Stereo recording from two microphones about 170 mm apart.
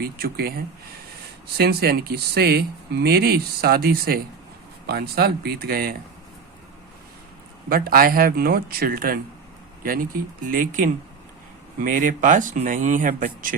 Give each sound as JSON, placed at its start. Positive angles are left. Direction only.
{"t": 0.0, "sound": "speech", "side_deg": -65}
{"t": 7.7, "sound": "speech", "side_deg": -60}